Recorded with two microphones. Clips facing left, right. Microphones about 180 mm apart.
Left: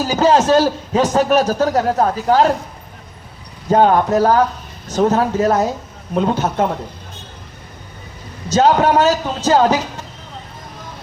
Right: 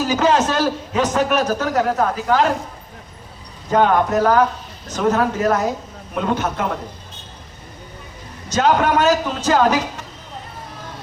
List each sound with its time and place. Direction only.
0.2 s a man's voice: 30° left (ahead or behind)
3.7 s a man's voice: 30° left (ahead or behind)
8.5 s a man's voice: 30° left (ahead or behind)